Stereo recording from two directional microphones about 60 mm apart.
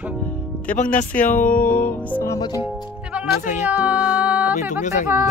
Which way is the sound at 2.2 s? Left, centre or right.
Left.